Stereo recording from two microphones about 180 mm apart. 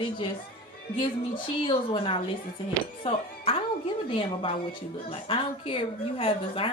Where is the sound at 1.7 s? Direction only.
30° left (ahead or behind).